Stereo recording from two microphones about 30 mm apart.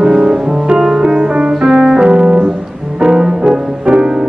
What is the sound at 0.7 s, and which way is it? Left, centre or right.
Music, centre.